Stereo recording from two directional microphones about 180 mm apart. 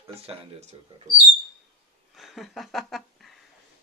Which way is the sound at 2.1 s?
Centre (ahead or behind).